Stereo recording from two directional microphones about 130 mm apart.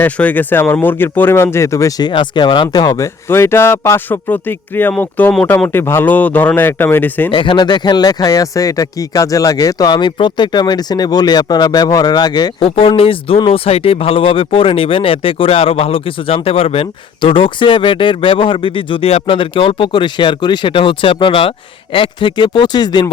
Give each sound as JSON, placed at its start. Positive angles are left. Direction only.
{"t": 0.0, "sound": "speech", "side_deg": 10}
{"t": 2.0, "sound": "speech", "side_deg": 35}
{"t": 3.2, "sound": "speech", "side_deg": 20}
{"t": 7.3, "sound": "speech", "side_deg": 40}
{"t": 12.5, "sound": "speech", "side_deg": 50}